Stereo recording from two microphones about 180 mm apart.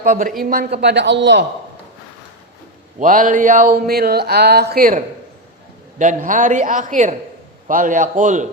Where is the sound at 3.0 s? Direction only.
45° right (ahead or behind).